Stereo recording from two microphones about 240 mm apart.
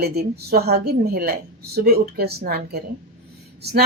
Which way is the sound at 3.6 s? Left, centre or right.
Right.